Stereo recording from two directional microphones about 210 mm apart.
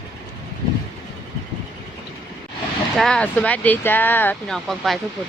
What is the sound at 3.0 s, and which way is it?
Speech, 5° left (ahead or behind).